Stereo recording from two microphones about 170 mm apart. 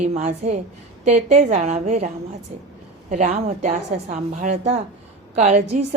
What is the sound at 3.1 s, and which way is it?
A woman's voice, 45° right (ahead or behind).